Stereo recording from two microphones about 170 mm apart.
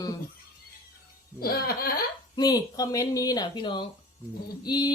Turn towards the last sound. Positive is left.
turn(degrees=25)  # may be behind; listen again after turning